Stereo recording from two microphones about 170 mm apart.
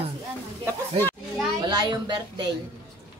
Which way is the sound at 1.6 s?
25° right (ahead or behind).